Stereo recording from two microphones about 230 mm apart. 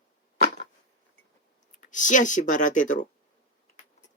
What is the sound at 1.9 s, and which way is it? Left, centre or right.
Speech, left.